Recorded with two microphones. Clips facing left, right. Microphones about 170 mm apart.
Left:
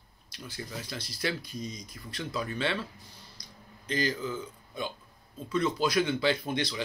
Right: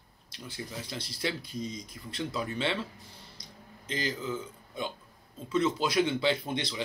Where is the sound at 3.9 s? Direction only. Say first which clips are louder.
Left 2 dB; 25° right (ahead or behind).